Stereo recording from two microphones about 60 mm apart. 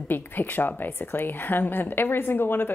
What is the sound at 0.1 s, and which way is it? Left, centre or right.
A woman's voice, left.